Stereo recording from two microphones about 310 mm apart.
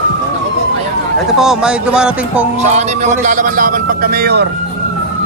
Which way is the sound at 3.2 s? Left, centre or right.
Right.